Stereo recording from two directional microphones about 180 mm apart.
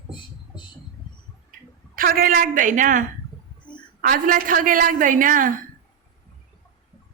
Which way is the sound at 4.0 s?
50° right (ahead or behind).